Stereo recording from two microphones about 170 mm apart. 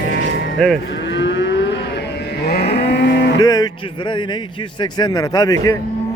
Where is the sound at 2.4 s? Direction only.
70° left (ahead or behind); by 3.4 s 90° left.